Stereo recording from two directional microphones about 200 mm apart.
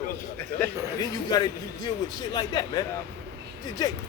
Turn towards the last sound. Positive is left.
turn(degrees=20)  # may be behind; listen again after turning